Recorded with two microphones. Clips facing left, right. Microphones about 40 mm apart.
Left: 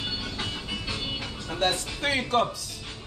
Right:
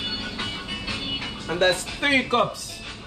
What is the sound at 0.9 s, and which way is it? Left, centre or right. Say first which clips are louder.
Speech: right 3 dB; right.